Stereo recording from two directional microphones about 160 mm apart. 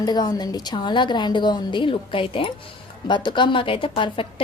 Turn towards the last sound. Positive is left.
turn(degrees=35)  # may be behind; listen again after turning